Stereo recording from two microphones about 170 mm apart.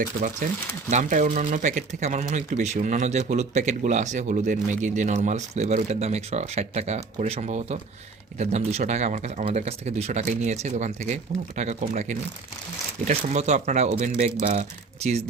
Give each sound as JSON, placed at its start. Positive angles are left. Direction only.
{"t": 0.0, "sound": "speech", "side_deg": -45}